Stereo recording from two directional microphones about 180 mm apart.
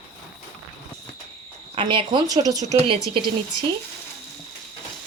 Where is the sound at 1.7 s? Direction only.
30° right (ahead or behind).